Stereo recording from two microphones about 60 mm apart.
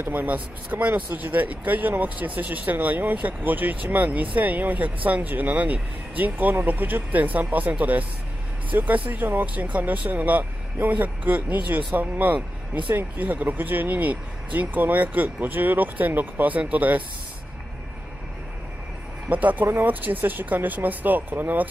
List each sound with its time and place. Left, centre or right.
0.0 s speech: right
19.2 s speech: right